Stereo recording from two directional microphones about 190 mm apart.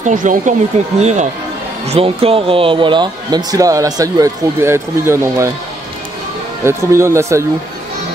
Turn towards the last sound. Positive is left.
turn(degrees=-15)  # may be behind; listen again after turning